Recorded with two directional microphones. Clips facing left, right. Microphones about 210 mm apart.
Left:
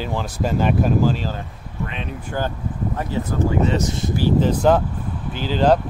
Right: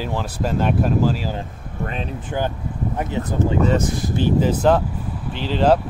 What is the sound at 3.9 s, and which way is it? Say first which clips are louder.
Speech: even; 25° left (ahead or behind).